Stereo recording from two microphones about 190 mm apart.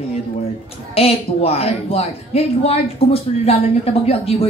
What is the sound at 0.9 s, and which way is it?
A woman's voice, 30° left (ahead or behind).